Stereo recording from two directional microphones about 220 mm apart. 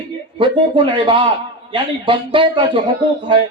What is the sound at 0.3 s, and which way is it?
Speech, 20° right (ahead or behind).